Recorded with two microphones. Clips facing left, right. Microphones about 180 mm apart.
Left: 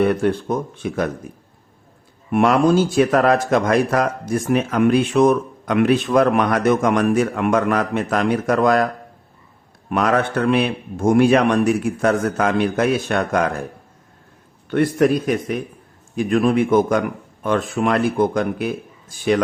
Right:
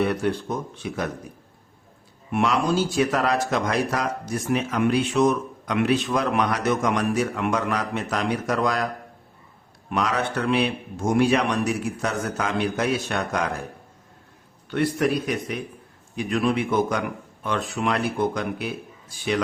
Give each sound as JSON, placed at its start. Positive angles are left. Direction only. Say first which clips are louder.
{"t": 0.0, "sound": "speech", "louder": "left 6 dB", "side_deg": 50}
{"t": 2.3, "sound": "speech", "louder": "left 7 dB", "side_deg": 50}
{"t": 9.9, "sound": "speech", "louder": "left 6 dB", "side_deg": 55}
{"t": 14.7, "sound": "speech", "louder": "left 6 dB", "side_deg": 50}